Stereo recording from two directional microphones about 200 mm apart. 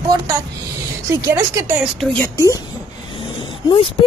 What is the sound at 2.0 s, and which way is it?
Speech, 10° left (ahead or behind).